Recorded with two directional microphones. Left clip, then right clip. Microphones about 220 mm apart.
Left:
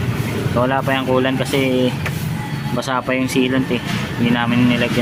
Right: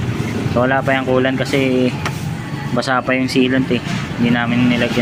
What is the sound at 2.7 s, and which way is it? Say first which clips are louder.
Speech: right 3 dB; 5° right (ahead or behind).